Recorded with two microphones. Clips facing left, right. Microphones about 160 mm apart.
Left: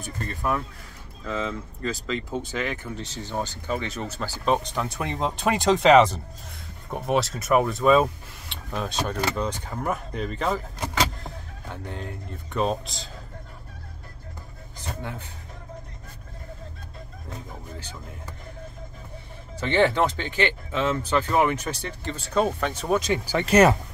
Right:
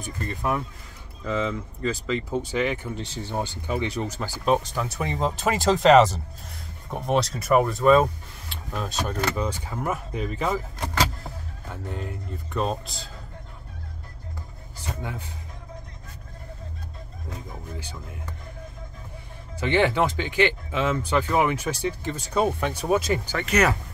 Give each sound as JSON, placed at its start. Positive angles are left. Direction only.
{"t": 0.0, "sound": "speech", "side_deg": -15}
{"t": 8.9, "sound": "speech", "side_deg": 10}
{"t": 9.3, "sound": "speech", "side_deg": -5}
{"t": 10.8, "sound": "vehicle", "side_deg": -5}
{"t": 12.5, "sound": "speech", "side_deg": 0}
{"t": 15.0, "sound": "speech", "side_deg": -10}
{"t": 19.6, "sound": "speech", "side_deg": -10}
{"t": 23.3, "sound": "speech", "side_deg": 30}